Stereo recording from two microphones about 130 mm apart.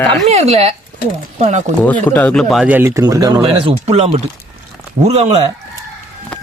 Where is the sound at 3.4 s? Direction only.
50° right (ahead or behind).